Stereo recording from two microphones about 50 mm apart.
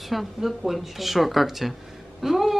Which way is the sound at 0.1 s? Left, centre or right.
Centre.